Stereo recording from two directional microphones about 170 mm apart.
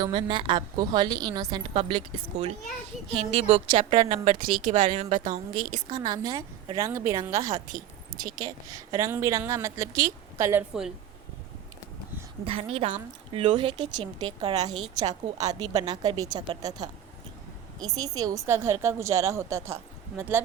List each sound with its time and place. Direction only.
0.0 s a woman's voice: 30° right (ahead or behind)
4.3 s a woman's voice: 45° right (ahead or behind)
6.0 s a woman's voice: 20° right (ahead or behind)
12.5 s a woman's voice: 35° right (ahead or behind)
15.0 s a woman's voice: 20° right (ahead or behind)
15.5 s a woman's voice: 35° right (ahead or behind)
15.9 s a woman's voice: 25° right (ahead or behind)